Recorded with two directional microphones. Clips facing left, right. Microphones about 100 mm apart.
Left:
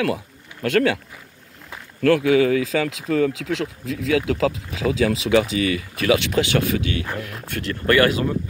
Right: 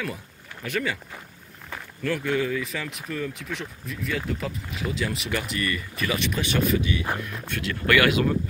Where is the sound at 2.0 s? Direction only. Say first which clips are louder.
Left 10 dB; 90° left; by 6.4 s 75° left (ahead or behind).